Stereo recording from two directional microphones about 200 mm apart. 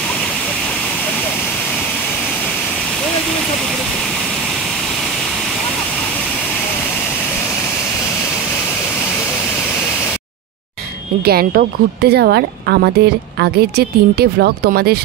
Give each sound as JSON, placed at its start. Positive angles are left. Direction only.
{"t": 11.2, "sound": "speech", "side_deg": -50}